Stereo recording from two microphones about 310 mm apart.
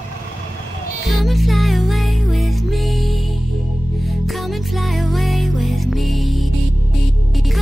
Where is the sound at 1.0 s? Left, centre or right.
Centre.